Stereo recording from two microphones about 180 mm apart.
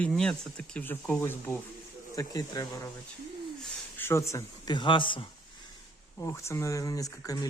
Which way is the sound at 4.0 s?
15° left (ahead or behind).